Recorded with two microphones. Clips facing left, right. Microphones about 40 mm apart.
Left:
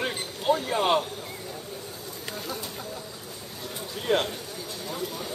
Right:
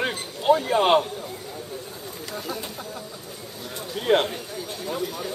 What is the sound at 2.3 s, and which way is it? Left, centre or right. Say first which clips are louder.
Speech: right 4 dB; centre.